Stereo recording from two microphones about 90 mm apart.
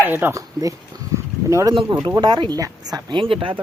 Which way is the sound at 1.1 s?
35° right (ahead or behind).